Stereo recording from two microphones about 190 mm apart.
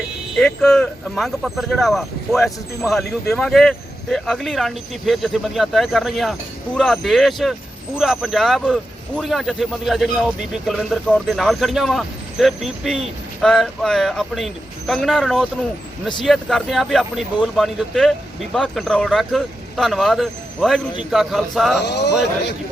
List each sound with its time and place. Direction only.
0.3 s speech: centre (ahead or behind)
21.8 s a man's voice: 65° left (ahead or behind)